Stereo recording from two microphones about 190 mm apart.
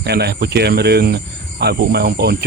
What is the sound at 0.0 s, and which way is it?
Speech, 60° right (ahead or behind).